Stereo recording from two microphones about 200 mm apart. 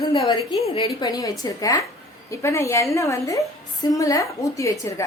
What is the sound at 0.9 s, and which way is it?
A woman's voice, 15° left (ahead or behind).